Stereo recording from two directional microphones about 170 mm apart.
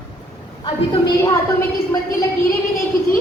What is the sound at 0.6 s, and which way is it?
Speech, 25° left (ahead or behind).